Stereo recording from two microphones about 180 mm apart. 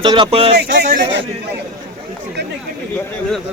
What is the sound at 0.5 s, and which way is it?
Speech, 55° right (ahead or behind).